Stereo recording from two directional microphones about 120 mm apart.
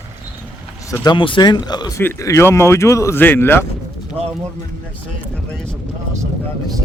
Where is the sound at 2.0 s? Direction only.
20° left (ahead or behind).